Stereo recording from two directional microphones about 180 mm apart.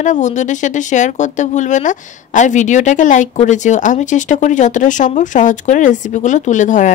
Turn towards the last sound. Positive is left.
turn(degrees=45)  # may be behind; listen again after turning